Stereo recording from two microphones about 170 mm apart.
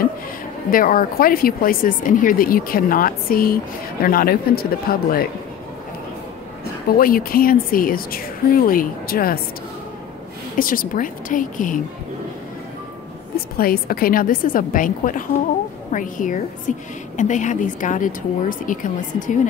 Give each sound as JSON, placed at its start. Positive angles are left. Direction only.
{"t": 0.7, "sound": "speech", "side_deg": 55}
{"t": 7.0, "sound": "speech", "side_deg": 60}
{"t": 10.6, "sound": "speech", "side_deg": 55}
{"t": 13.6, "sound": "speech", "side_deg": 60}